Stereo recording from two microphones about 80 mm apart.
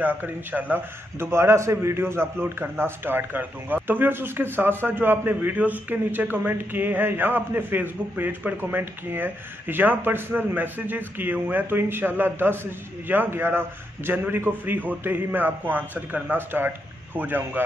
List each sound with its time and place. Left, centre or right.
0.0 s a man's voice: right